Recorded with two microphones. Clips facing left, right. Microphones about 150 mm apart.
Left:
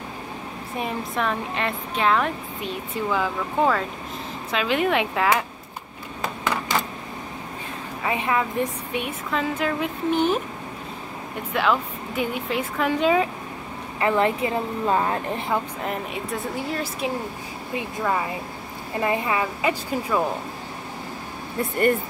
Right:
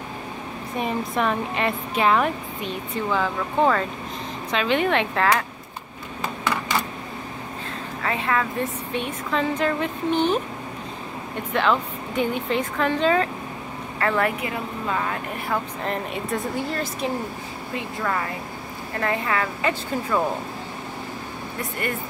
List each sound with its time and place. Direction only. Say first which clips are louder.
0.7 s speech: right 2 dB; centre (ahead or behind)
3.1 s speech: right 1 dB; 5° left (ahead or behind)
8.0 s a woman's voice: left 1 dB; 15° left (ahead or behind)
11.5 s a woman's voice: right 1 dB; 5° left (ahead or behind); by 15.6 s 25° left (ahead or behind)
15.8 s speech: right 1 dB; 5° left (ahead or behind)
17.7 s a woman's voice: left 2 dB; 15° left (ahead or behind)